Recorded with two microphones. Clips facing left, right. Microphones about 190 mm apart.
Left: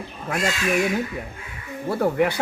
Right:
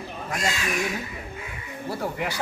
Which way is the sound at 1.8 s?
55° left (ahead or behind).